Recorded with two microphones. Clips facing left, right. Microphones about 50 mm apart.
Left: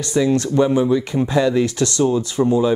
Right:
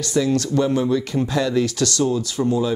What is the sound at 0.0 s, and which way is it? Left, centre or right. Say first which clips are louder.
Speech: left 2 dB; left.